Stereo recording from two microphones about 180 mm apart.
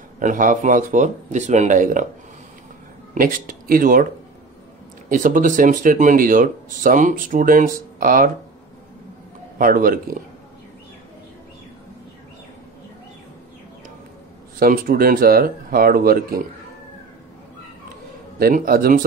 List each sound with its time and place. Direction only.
0.2 s speech: 45° right (ahead or behind)
3.2 s speech: 50° right (ahead or behind)
5.1 s speech: 45° right (ahead or behind)
9.6 s speech: 50° right (ahead or behind)
14.6 s speech: 50° right (ahead or behind)
18.4 s speech: 55° right (ahead or behind)